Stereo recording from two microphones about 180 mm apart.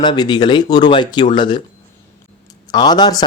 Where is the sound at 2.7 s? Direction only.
25° left (ahead or behind).